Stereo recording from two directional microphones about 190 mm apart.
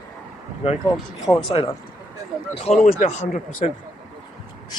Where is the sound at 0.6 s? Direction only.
30° left (ahead or behind).